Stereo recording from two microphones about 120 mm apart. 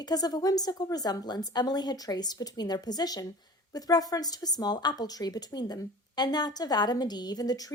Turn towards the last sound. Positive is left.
turn(degrees=30)  # may be behind; listen again after turning